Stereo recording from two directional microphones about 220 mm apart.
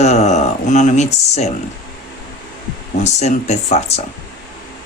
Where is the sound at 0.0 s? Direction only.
30° left (ahead or behind).